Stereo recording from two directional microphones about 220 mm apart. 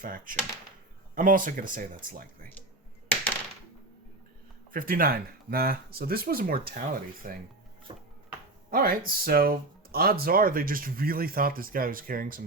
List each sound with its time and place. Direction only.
0.0 s speech: 40° right (ahead or behind)
4.7 s speech: 40° right (ahead or behind)
7.9 s a sound: 25° right (ahead or behind)
8.7 s speech: 40° right (ahead or behind)